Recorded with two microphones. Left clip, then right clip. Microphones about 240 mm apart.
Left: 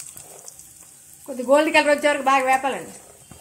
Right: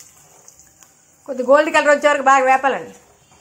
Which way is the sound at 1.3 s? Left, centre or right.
Centre.